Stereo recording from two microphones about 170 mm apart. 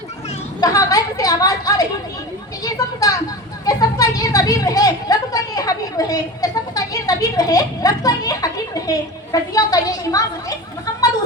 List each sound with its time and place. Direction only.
0.6 s a woman's voice: 20° left (ahead or behind)